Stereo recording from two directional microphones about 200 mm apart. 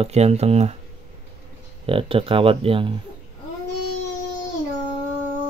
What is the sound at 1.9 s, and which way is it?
Speech, 25° right (ahead or behind).